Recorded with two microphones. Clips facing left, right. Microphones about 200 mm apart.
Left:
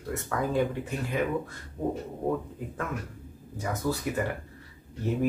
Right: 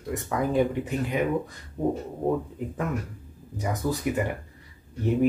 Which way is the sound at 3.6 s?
15° right (ahead or behind).